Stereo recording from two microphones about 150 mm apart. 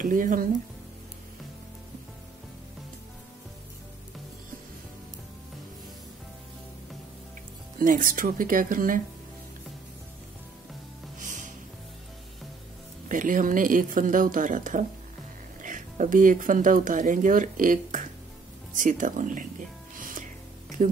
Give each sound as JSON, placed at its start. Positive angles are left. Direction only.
{"t": 0.0, "sound": "speech", "side_deg": -65}
{"t": 7.8, "sound": "speech", "side_deg": -65}
{"t": 11.1, "sound": "music", "side_deg": -55}
{"t": 13.1, "sound": "speech", "side_deg": -60}
{"t": 20.0, "sound": "music", "side_deg": -65}
{"t": 20.8, "sound": "speech", "side_deg": -60}